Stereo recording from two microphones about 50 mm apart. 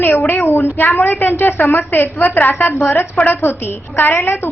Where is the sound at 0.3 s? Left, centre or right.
Left.